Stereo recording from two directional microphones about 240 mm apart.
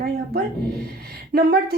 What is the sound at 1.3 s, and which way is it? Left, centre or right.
Speech, right.